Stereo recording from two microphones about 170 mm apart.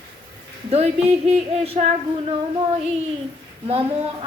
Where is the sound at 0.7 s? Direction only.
40° right (ahead or behind).